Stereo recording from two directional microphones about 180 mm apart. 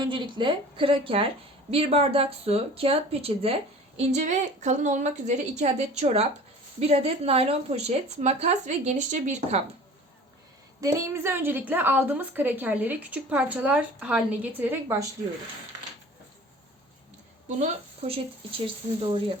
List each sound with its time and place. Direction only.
0.0 s speech: 25° right (ahead or behind)
10.8 s a woman's voice: 20° right (ahead or behind)
17.6 s speech: 30° right (ahead or behind)